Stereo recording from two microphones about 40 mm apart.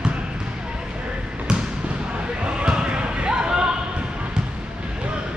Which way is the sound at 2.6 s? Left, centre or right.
Right.